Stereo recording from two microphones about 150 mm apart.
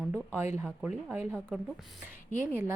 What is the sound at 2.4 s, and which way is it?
Speech, 15° right (ahead or behind).